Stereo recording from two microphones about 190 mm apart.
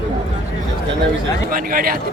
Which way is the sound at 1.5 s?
50° right (ahead or behind).